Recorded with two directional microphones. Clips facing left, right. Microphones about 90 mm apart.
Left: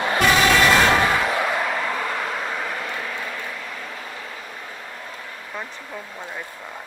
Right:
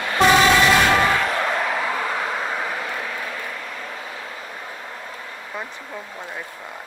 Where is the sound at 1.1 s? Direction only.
5° left (ahead or behind).